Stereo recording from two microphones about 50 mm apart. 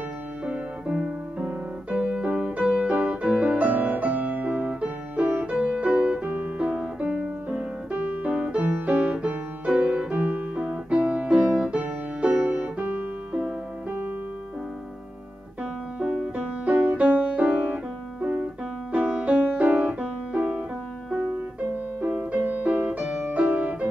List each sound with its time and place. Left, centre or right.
0.5 s piano: right
6.2 s music: right
16.0 s music: right
22.1 s music: right